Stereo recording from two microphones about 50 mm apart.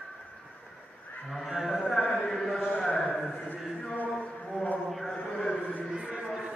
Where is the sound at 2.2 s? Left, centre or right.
Centre.